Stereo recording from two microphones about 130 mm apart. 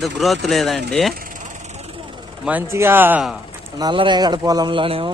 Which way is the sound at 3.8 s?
35° right (ahead or behind).